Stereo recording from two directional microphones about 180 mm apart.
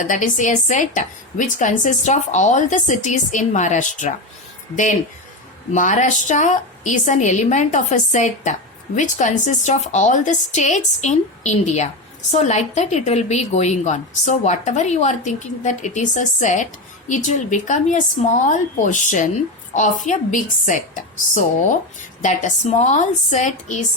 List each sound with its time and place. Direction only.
0.0 s a woman's voice: 45° left (ahead or behind)